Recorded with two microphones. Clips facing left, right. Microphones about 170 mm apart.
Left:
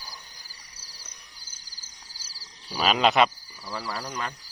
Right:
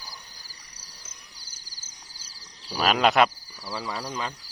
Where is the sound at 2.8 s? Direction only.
Centre (ahead or behind).